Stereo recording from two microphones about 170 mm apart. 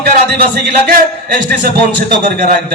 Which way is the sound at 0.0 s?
65° right (ahead or behind).